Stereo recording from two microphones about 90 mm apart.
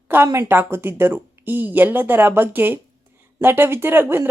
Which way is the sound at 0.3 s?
25° right (ahead or behind).